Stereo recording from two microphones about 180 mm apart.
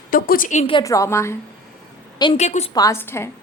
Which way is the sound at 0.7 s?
20° left (ahead or behind).